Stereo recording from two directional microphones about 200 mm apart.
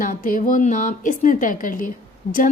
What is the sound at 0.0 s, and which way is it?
A woman's voice, 40° left (ahead or behind).